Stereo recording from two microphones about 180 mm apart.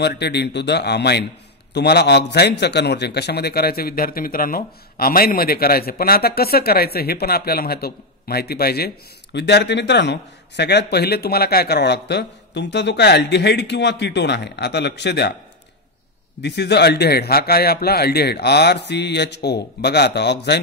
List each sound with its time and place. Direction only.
0.0 s a man's voice: 70° left (ahead or behind)
16.3 s a man's voice: 70° left (ahead or behind)